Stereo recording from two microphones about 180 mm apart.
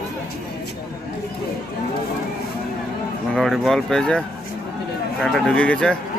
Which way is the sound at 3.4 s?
Centre (ahead or behind).